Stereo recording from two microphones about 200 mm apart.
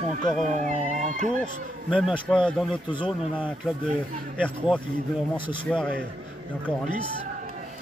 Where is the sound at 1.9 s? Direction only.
5° right (ahead or behind).